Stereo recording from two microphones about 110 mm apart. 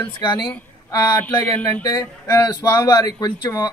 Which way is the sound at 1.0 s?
20° left (ahead or behind).